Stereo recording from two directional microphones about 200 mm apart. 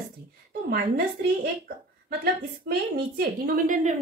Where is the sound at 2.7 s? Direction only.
45° right (ahead or behind).